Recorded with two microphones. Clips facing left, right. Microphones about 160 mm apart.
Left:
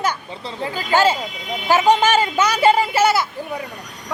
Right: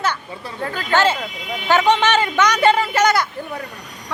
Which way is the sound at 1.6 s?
10° left (ahead or behind).